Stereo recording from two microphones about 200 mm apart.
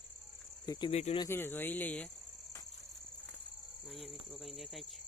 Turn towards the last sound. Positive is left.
turn(degrees=0)  # may be behind; listen again after turning